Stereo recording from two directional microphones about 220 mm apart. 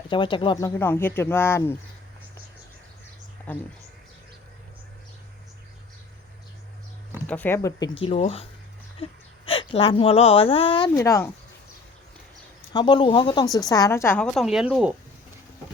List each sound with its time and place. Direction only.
0.1 s speech: 20° left (ahead or behind)
7.3 s speech: 10° left (ahead or behind); by 8.4 s 25° left (ahead or behind)
9.5 s speech: 25° left (ahead or behind)
12.7 s a woman's voice: 20° left (ahead or behind); by 14.9 s 5° right (ahead or behind)